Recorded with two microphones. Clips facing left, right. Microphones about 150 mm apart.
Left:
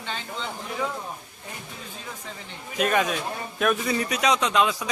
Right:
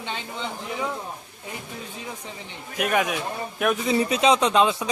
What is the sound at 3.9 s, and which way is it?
Speech, 25° right (ahead or behind).